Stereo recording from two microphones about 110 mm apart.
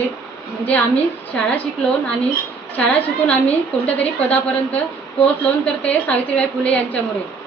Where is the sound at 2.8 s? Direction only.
15° left (ahead or behind).